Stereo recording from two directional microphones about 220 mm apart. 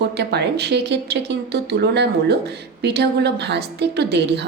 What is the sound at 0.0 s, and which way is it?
A woman's voice, 50° right (ahead or behind).